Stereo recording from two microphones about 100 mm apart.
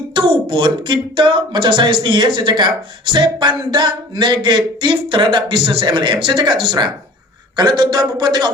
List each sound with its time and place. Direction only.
0.1 s speech: 55° right (ahead or behind)